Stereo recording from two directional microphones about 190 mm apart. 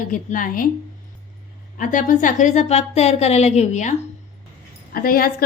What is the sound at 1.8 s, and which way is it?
A woman's voice, 45° left (ahead or behind).